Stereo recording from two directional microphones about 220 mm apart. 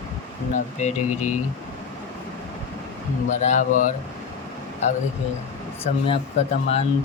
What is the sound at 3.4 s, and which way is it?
Speech, 35° left (ahead or behind).